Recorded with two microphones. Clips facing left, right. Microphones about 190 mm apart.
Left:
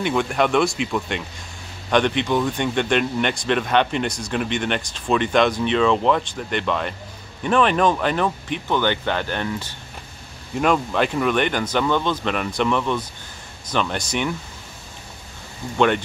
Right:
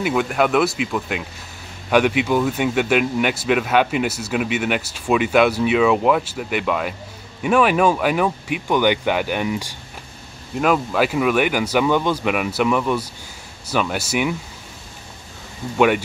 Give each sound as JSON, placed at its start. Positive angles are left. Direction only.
{"t": 0.0, "sound": "speech", "side_deg": -5}